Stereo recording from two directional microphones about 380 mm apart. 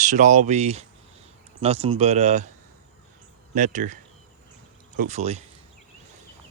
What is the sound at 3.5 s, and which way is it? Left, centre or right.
Speech, centre.